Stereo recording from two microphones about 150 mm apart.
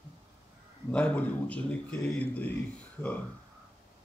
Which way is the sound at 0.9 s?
10° left (ahead or behind).